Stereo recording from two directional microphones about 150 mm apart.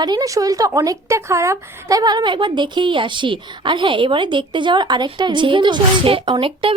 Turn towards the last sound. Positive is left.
turn(degrees=-35)  # may be behind; listen again after turning